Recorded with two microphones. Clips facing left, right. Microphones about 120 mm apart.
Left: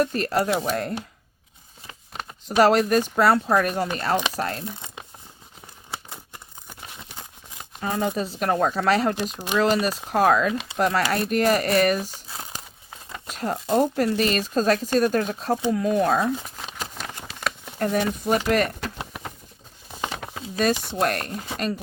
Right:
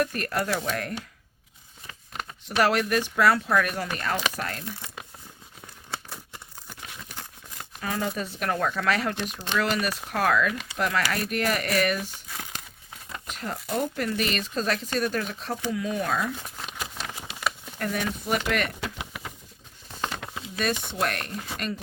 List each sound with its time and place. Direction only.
0.0 s speech: 30° left (ahead or behind)
2.6 s speech: 30° left (ahead or behind)
4.6 s crumpling: 20° left (ahead or behind)
6.7 s a sound: 20° left (ahead or behind)
7.8 s speech: 30° left (ahead or behind)
17.2 s patter: 5° right (ahead or behind)
17.7 s speech: 35° left (ahead or behind)
19.9 s a sound: 10° left (ahead or behind)
20.2 s a sound: 40° left (ahead or behind)
21.0 s speech: 35° left (ahead or behind)